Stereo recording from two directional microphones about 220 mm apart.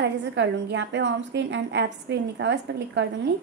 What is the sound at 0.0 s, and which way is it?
A woman's voice, 50° right (ahead or behind).